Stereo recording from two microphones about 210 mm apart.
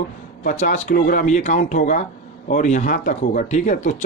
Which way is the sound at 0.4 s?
35° left (ahead or behind).